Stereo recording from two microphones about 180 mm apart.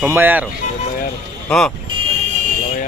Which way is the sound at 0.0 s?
10° right (ahead or behind).